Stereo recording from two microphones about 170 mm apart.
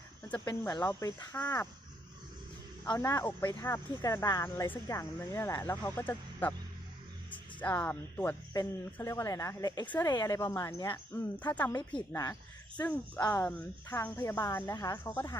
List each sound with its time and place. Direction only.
0.7 s speech: 15° left (ahead or behind)
2.8 s speech: 25° left (ahead or behind)
7.6 s speech: 10° left (ahead or behind)
11.7 s speech: 25° left (ahead or behind)
12.7 s speech: 10° left (ahead or behind)